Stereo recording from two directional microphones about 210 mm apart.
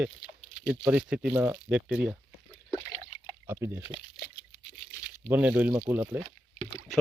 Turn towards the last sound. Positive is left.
turn(degrees=-10)  # may be behind; listen again after turning